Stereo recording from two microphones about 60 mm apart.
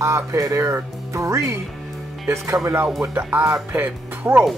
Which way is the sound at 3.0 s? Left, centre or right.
Right.